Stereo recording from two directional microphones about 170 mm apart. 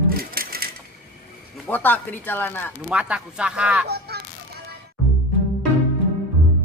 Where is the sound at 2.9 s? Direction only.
5° right (ahead or behind).